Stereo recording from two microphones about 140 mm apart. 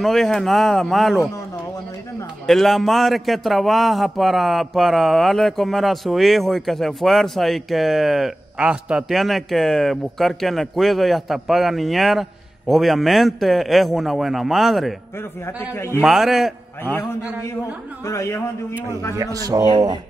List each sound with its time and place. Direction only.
0.0 s a man's voice: centre (ahead or behind)
2.4 s a man's voice: centre (ahead or behind)
16.0 s a man's voice: 5° right (ahead or behind)
18.0 s a man's voice: 20° left (ahead or behind)
19.1 s speech: 25° right (ahead or behind)